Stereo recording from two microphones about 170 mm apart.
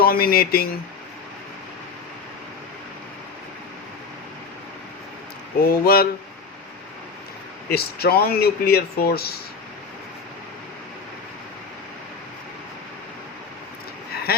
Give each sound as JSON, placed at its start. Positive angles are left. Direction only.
{"t": 0.0, "sound": "speech", "side_deg": 60}
{"t": 5.6, "sound": "speech", "side_deg": 60}
{"t": 7.7, "sound": "speech", "side_deg": 65}
{"t": 14.3, "sound": "a sound", "side_deg": 65}